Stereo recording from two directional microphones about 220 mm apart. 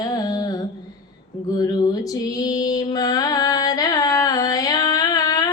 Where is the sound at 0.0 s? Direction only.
15° left (ahead or behind).